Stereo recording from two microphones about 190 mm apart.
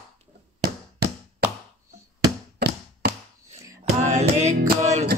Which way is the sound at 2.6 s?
60° right (ahead or behind).